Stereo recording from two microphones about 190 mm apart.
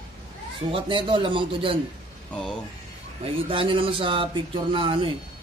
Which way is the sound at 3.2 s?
30° right (ahead or behind).